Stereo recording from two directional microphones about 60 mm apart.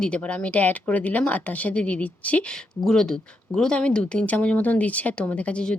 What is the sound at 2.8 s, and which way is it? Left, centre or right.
Speech, centre.